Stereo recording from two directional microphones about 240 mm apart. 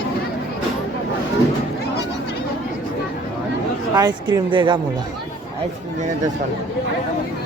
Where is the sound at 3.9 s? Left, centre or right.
Centre.